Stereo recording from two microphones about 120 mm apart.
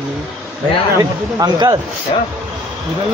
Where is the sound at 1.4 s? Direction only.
35° right (ahead or behind).